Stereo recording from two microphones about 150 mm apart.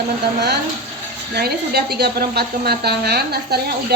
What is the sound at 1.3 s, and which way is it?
A woman's voice, 90° right.